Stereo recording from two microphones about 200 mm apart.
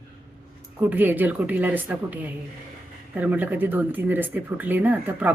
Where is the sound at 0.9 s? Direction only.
10° right (ahead or behind).